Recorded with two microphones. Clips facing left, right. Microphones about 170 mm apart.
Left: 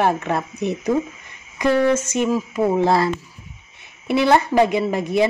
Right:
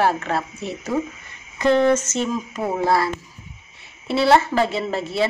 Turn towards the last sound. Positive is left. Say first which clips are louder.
# left 4 dB
turn(degrees=15)  # may be behind; listen again after turning